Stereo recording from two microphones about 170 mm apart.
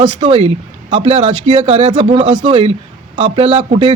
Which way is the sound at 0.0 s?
25° right (ahead or behind).